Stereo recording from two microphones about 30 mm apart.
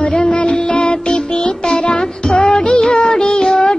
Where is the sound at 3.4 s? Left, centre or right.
Left.